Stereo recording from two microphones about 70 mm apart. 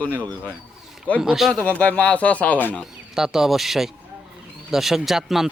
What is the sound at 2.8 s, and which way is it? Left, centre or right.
A man's voice, centre.